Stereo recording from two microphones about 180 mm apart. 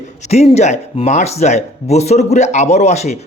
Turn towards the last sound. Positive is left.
turn(degrees=40)  # may be behind; listen again after turning